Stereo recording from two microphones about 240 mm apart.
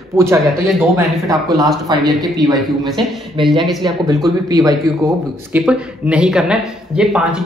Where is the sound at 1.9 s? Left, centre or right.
Centre.